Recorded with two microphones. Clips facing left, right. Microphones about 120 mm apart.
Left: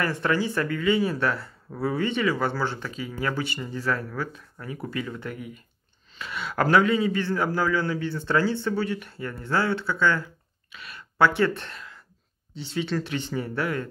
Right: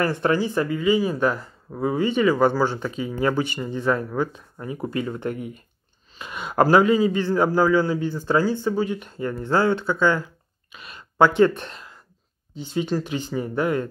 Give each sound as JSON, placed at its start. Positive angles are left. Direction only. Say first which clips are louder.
{"t": 0.4, "sound": "speech", "louder": "right 3 dB", "side_deg": -25}
{"t": 6.1, "sound": "speech", "louder": "right 3 dB", "side_deg": -20}
{"t": 6.6, "sound": "speech", "louder": "right 4 dB", "side_deg": -30}
{"t": 12.9, "sound": "speech", "louder": "right 3 dB", "side_deg": -35}
{"t": 13.3, "sound": "speech", "louder": "right 6 dB", "side_deg": -20}